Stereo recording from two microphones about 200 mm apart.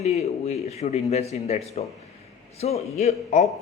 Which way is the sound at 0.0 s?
30° left (ahead or behind).